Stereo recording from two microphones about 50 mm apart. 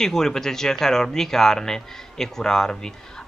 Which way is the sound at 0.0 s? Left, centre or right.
Centre.